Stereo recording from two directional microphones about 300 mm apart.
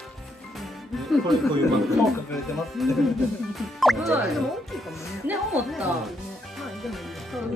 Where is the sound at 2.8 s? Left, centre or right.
Centre.